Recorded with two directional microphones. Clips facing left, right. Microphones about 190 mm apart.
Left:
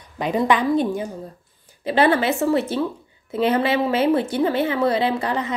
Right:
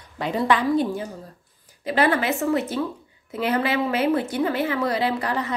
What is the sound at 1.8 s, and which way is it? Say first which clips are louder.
A woman's voice: left 3 dB; 30° left (ahead or behind).